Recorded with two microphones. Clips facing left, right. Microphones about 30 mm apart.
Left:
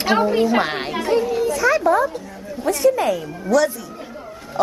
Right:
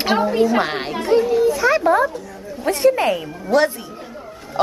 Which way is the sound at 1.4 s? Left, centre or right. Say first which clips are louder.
Right 1 dB; centre.